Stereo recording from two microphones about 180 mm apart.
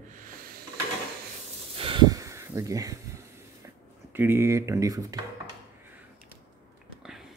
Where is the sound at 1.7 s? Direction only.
30° right (ahead or behind).